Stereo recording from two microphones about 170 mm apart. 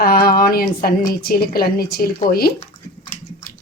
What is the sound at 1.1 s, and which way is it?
A woman's voice, 65° left (ahead or behind).